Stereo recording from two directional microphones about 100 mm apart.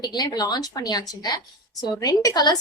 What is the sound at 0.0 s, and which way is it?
A woman's voice, 40° left (ahead or behind).